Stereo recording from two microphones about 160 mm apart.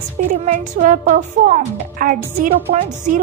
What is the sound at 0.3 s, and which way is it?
A woman's voice, 55° right (ahead or behind).